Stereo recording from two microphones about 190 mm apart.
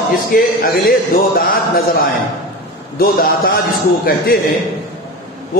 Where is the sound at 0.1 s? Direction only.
50° left (ahead or behind).